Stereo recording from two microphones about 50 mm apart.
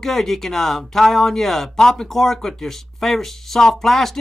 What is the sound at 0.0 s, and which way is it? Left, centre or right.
Speech, centre.